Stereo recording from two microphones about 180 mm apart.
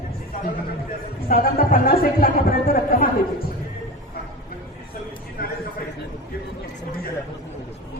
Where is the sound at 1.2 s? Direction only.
55° left (ahead or behind).